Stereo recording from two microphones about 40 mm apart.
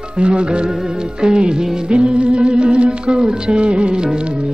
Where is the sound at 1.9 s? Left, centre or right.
Right.